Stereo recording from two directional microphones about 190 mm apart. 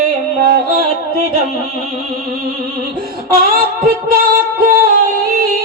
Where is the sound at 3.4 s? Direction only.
50° right (ahead or behind).